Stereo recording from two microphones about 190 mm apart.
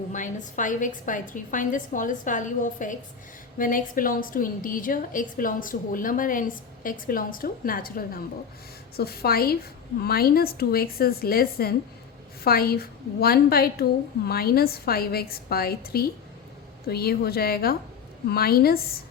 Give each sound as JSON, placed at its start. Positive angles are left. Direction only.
{"t": 0.1, "sound": "a woman's voice", "side_deg": 40}